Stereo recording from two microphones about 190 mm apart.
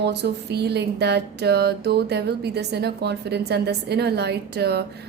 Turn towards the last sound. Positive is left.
turn(degrees=-60)  # may be behind; listen again after turning